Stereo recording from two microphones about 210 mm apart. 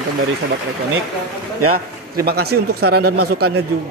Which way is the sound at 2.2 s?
50° right (ahead or behind).